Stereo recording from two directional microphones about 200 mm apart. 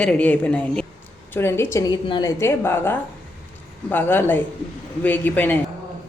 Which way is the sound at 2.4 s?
10° left (ahead or behind).